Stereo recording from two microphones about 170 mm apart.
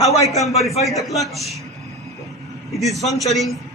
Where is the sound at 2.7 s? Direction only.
Centre (ahead or behind).